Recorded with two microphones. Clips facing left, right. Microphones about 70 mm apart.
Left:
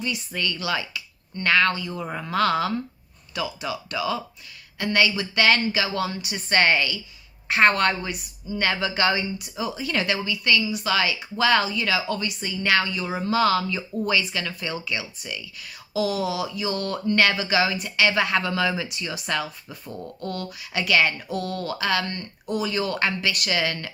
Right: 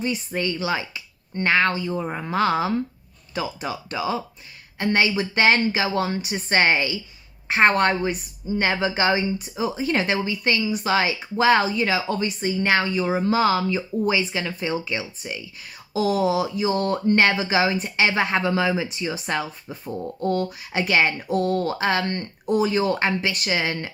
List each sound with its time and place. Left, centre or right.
0.3 s speech: right
3.3 s speech: right
3.9 s speech: right
6.5 s speech: right
21.2 s speech: right